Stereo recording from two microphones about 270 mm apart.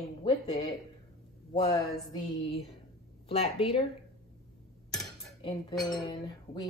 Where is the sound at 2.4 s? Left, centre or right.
Left.